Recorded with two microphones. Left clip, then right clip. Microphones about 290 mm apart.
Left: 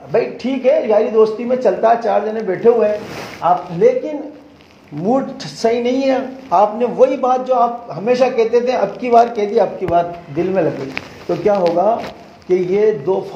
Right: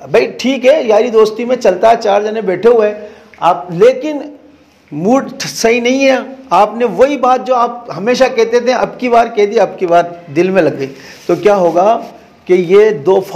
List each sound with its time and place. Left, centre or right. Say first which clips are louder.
0.1 s a man's voice: right 6 dB; right
5.0 s speech: right 5 dB; right